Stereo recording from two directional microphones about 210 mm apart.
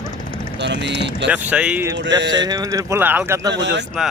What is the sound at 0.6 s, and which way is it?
Speech, 55° right (ahead or behind).